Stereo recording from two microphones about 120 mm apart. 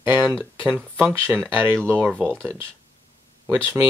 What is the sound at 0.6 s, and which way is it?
Speech, 15° right (ahead or behind).